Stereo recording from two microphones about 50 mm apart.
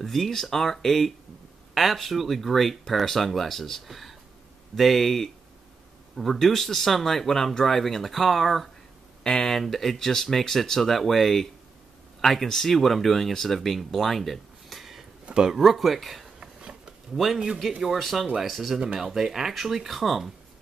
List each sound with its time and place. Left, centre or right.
0.0 s speech: centre
9.2 s speech: centre
16.3 s a sound: centre
17.8 s speech: centre